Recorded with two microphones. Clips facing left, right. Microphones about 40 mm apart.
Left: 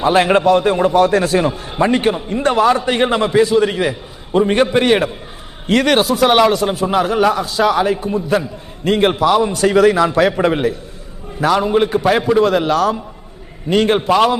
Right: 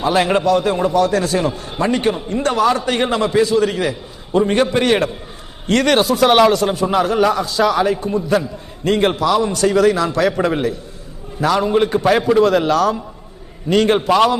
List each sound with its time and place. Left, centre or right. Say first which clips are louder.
0.0 s a man's voice: left 3 dB; left; by 14.3 s centre